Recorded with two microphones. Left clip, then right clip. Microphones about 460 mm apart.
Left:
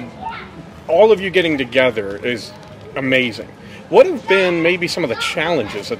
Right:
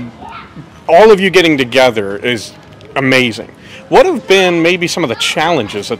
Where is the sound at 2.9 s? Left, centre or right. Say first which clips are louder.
Right 6 dB; right.